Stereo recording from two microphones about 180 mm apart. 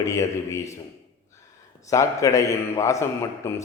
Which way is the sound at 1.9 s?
15° left (ahead or behind).